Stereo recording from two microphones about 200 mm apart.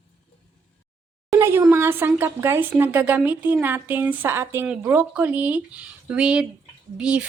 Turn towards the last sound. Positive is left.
turn(degrees=-5)  # may be behind; listen again after turning